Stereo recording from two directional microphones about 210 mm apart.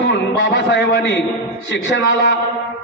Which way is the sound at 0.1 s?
60° left (ahead or behind).